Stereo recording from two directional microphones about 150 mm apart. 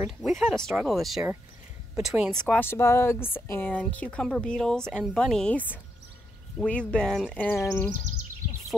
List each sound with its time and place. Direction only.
0.0 s speech: centre (ahead or behind)
2.6 s speech: 15° left (ahead or behind)